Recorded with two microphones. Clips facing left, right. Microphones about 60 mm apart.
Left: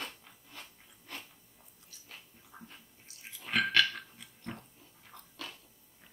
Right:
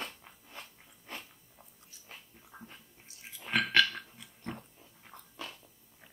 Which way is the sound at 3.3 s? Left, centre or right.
Centre.